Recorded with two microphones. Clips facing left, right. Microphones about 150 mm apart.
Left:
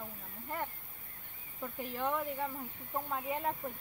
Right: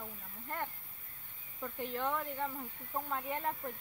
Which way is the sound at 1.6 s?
5° left (ahead or behind).